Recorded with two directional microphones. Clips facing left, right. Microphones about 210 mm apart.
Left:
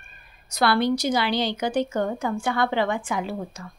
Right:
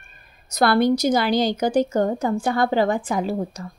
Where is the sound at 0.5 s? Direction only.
45° right (ahead or behind).